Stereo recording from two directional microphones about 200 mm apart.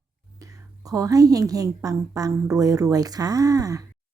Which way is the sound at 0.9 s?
15° right (ahead or behind).